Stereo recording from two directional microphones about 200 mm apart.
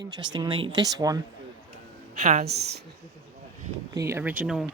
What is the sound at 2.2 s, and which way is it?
Speech, 35° right (ahead or behind).